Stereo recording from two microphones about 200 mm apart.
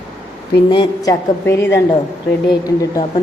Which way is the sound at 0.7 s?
20° left (ahead or behind).